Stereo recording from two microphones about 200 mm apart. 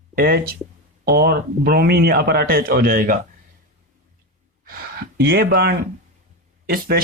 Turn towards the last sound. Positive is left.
turn(degrees=-45)  # may be behind; listen again after turning